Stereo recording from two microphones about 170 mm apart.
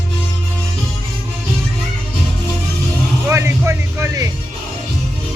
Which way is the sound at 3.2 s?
15° right (ahead or behind).